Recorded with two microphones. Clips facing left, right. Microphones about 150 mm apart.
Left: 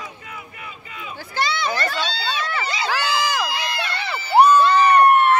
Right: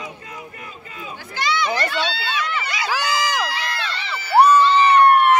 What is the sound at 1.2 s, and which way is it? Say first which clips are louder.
Speech: right 1 dB; 30° left (ahead or behind).